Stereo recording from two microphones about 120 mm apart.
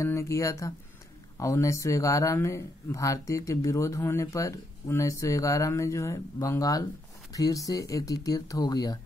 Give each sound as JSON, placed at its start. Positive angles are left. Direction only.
{"t": 0.0, "sound": "speech", "side_deg": 25}